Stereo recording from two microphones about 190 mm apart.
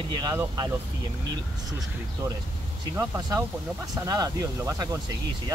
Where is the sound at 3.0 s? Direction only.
20° right (ahead or behind).